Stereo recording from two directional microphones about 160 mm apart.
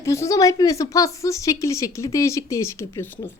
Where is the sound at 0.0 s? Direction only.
20° left (ahead or behind).